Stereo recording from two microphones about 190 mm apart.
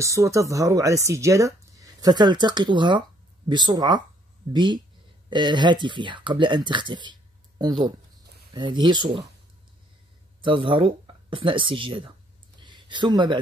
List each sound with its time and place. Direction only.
0.0 s speech: 15° right (ahead or behind)
10.4 s speech: 25° right (ahead or behind)
12.6 s a sound: 25° right (ahead or behind)